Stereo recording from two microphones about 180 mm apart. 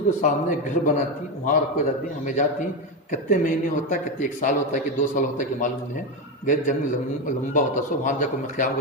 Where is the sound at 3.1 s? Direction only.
45° left (ahead or behind).